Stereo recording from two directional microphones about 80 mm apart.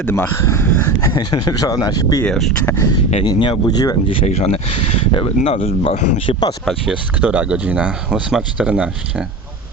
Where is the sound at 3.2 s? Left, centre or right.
Left.